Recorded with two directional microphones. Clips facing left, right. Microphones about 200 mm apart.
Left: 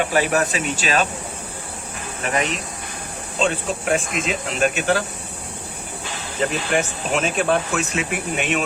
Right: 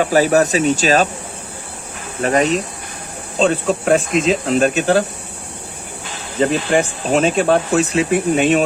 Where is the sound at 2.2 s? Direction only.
40° right (ahead or behind).